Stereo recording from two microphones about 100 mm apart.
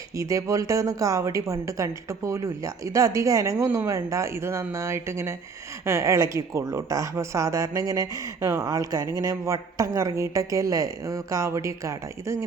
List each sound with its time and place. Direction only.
0.2 s speech: 35° right (ahead or behind)